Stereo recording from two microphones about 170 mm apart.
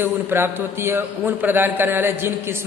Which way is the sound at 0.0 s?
15° right (ahead or behind).